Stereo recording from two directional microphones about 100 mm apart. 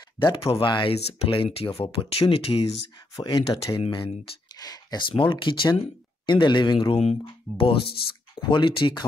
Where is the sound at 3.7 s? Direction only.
40° left (ahead or behind).